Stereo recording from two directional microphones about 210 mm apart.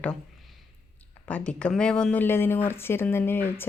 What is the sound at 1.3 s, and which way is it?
Speech, 5° left (ahead or behind).